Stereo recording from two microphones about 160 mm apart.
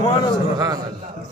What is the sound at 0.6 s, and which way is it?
Speech, 25° right (ahead or behind).